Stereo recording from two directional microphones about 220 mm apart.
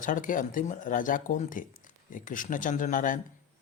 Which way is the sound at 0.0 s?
35° left (ahead or behind).